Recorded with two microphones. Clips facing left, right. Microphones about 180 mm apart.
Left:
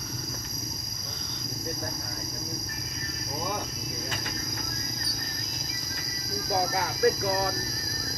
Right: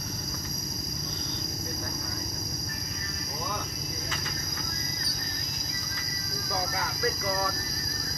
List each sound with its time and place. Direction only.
6.5 s speech: 50° left (ahead or behind)